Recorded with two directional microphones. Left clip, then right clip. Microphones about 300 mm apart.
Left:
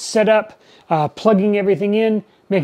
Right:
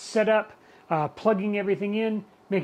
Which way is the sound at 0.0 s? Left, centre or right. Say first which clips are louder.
Left 8 dB; left.